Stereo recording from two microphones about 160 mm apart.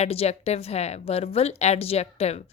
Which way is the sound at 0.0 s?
40° left (ahead or behind).